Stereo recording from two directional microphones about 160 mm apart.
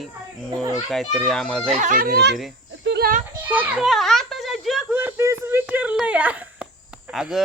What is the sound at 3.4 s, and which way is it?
Speech, 10° right (ahead or behind).